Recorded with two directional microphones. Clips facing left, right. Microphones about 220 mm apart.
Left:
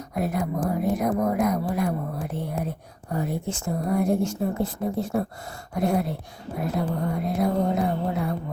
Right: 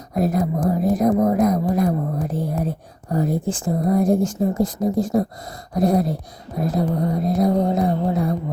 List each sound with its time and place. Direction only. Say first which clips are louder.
0.1 s music: right 6 dB; 40° right (ahead or behind)
1.2 s a sound: right 6 dB; 35° right (ahead or behind)
3.6 s music: right 5 dB; 35° right (ahead or behind)